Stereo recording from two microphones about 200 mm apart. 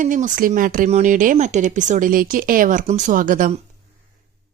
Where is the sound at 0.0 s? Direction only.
40° right (ahead or behind).